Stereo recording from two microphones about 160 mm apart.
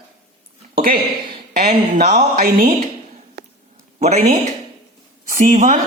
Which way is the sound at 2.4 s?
55° right (ahead or behind).